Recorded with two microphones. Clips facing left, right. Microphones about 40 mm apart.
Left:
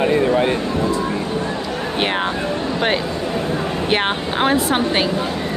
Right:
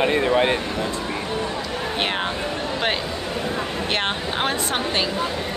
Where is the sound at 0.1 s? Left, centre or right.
Right.